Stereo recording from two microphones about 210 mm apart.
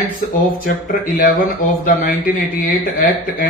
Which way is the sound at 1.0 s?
40° left (ahead or behind).